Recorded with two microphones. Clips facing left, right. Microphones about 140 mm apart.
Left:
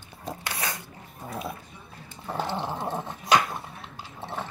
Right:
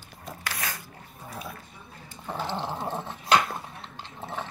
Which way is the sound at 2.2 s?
15° left (ahead or behind).